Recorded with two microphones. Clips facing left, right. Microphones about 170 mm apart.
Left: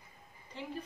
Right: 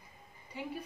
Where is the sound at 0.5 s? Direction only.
10° right (ahead or behind).